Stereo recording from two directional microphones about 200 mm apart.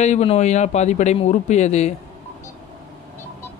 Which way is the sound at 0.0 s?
35° left (ahead or behind).